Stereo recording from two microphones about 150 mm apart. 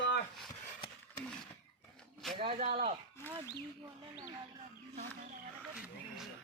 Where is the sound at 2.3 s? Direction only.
40° right (ahead or behind).